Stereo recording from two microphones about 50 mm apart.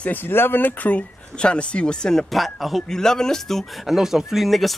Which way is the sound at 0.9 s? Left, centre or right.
Left.